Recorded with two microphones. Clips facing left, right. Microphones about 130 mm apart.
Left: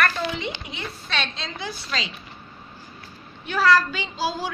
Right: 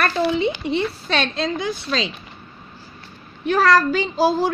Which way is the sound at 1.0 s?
50° right (ahead or behind).